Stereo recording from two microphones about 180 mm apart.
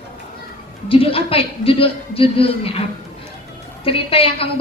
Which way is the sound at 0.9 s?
30° left (ahead or behind).